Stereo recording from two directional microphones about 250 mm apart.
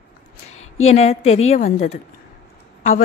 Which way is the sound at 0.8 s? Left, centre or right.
Left.